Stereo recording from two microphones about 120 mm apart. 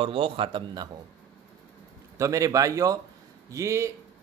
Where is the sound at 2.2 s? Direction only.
25° right (ahead or behind).